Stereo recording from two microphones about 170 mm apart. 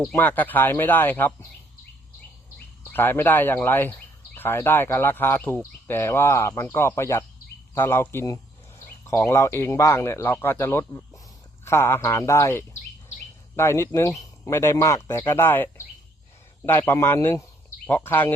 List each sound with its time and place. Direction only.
0.2 s speech: 10° left (ahead or behind)
2.9 s speech: 10° left (ahead or behind)